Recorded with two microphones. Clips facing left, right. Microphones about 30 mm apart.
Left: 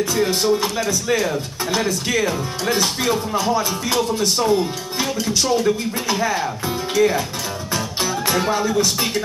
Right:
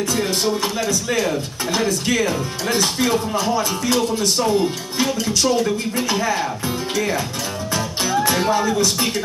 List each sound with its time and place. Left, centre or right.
0.0 s speech: centre
7.7 s music: centre
8.3 s speech: centre